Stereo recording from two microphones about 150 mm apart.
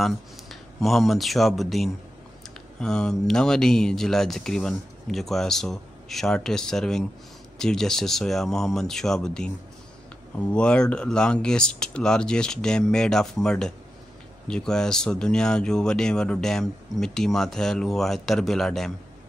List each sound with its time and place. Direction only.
0.0 s speech: centre (ahead or behind)